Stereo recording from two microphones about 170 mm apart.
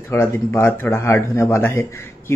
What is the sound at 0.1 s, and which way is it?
Speech, 15° left (ahead or behind).